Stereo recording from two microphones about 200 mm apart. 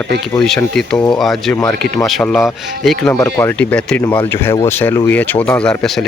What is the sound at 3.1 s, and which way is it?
Speech, 10° left (ahead or behind).